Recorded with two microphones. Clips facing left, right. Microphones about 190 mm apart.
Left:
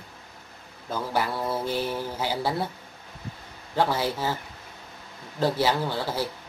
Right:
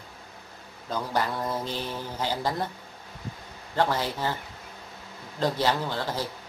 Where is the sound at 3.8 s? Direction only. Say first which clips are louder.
Left 1 dB; 10° left (ahead or behind).